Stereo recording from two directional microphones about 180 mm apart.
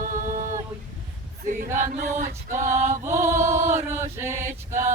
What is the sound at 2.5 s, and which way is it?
Chant, 15° right (ahead or behind).